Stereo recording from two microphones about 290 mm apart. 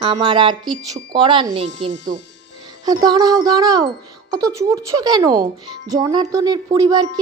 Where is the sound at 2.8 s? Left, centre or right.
Centre.